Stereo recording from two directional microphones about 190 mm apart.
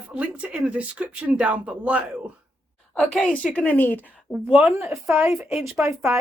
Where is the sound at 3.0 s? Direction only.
5° left (ahead or behind).